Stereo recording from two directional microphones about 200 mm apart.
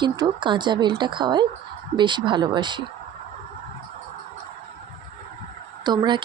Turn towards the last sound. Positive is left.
turn(degrees=-20)  # may be behind; listen again after turning